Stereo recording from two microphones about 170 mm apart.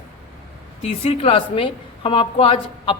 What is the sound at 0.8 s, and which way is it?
A woman's voice, 35° left (ahead or behind).